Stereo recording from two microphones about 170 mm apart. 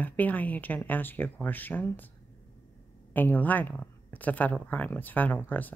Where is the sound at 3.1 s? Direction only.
10° left (ahead or behind).